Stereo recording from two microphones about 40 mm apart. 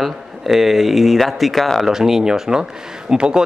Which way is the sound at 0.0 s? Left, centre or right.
Centre.